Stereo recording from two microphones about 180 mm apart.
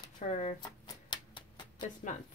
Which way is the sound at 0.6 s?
25° left (ahead or behind).